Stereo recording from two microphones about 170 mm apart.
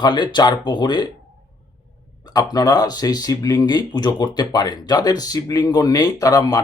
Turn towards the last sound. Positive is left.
turn(degrees=20)  # may be behind; listen again after turning